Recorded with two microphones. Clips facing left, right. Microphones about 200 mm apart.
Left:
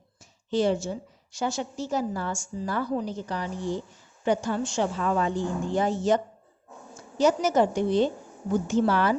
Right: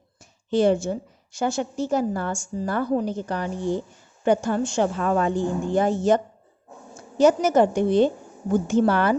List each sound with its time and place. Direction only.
0.2 s a woman's voice: 55° right (ahead or behind)